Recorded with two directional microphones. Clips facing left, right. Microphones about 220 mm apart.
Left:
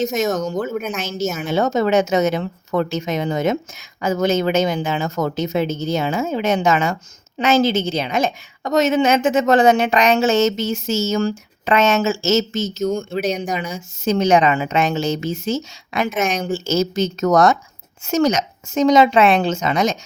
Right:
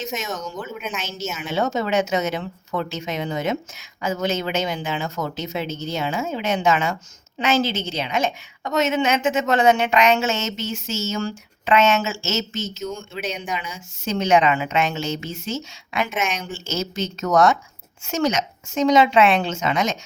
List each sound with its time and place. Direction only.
0.0 s a woman's voice: 40° left (ahead or behind)